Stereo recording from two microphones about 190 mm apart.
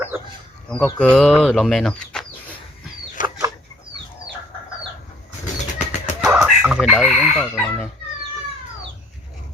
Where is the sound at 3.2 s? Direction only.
45° left (ahead or behind).